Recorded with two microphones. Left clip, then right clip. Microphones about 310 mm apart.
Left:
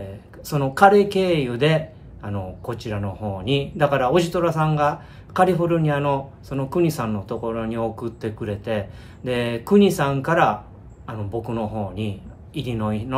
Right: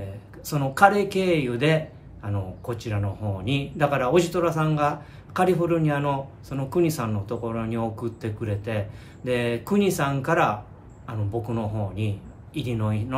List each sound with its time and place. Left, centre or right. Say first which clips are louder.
0.5 s a man's voice: left 4 dB; centre